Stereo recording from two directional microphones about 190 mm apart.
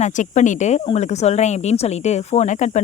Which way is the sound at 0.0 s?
40° left (ahead or behind).